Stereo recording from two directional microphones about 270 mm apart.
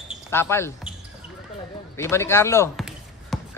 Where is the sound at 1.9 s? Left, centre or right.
Centre.